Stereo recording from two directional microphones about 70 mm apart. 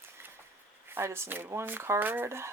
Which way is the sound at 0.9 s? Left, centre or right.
Right.